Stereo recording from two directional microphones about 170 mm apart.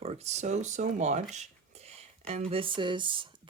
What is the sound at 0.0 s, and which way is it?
Speech, 40° right (ahead or behind).